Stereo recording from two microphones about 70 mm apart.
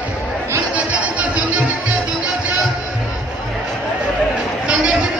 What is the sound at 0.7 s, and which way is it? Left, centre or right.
Music, centre.